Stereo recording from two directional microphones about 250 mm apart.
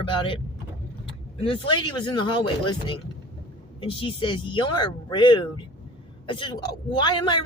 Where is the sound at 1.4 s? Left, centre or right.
Left.